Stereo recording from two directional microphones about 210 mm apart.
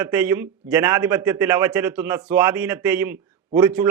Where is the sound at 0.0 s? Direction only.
10° right (ahead or behind).